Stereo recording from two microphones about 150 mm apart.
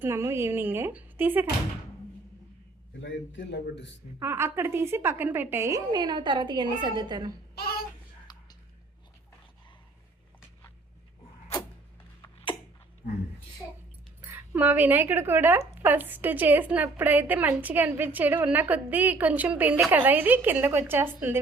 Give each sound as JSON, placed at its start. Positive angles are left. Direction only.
{"t": 0.0, "sound": "speech", "side_deg": -15}
{"t": 4.2, "sound": "speech", "side_deg": -15}
{"t": 7.5, "sound": "a sound", "side_deg": 90}
{"t": 14.3, "sound": "speech", "side_deg": -10}